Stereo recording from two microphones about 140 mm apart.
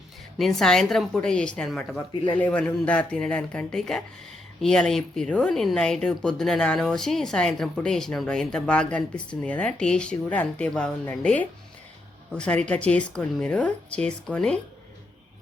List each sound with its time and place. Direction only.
0.3 s a woman's voice: centre (ahead or behind)
2.1 s a man's voice: 40° left (ahead or behind)
2.4 s a woman's voice: 10° left (ahead or behind)